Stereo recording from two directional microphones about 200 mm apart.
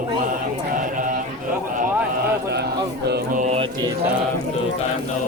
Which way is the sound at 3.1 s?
40° right (ahead or behind).